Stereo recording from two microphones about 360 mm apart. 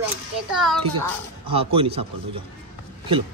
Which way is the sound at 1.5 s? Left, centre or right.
Centre.